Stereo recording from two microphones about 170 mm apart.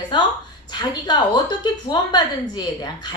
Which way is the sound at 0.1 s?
30° left (ahead or behind).